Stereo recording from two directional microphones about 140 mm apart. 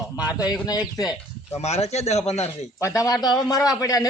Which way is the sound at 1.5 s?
50° left (ahead or behind).